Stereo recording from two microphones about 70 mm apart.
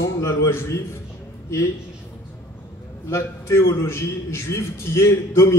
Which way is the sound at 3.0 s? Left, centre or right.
Left.